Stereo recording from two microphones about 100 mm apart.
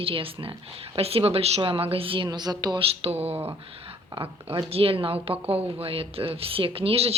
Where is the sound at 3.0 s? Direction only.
80° right.